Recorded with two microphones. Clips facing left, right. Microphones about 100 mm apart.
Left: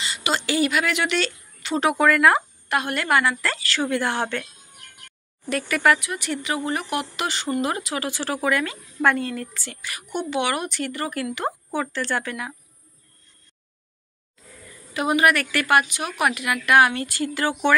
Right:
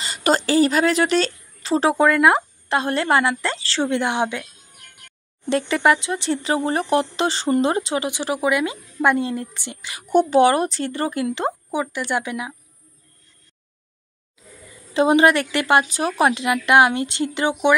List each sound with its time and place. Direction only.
0.0 s speech: 40° right (ahead or behind); by 4.5 s 15° right (ahead or behind)
5.5 s speech: 25° right (ahead or behind)
10.0 s speech: 40° right (ahead or behind); by 12.5 s 15° right (ahead or behind)
15.0 s speech: 30° right (ahead or behind)
15.9 s speech: 35° right (ahead or behind); by 17.7 s 15° right (ahead or behind)